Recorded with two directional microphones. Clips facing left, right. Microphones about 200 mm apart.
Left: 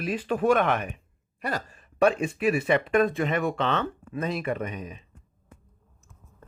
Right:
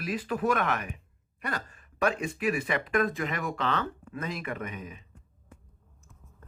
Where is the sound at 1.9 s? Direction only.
30° left (ahead or behind).